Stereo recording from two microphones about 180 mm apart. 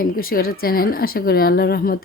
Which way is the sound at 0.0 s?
55° left (ahead or behind).